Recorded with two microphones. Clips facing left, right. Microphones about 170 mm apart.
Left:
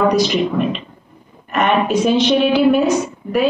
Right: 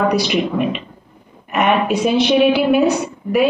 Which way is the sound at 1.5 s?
10° right (ahead or behind).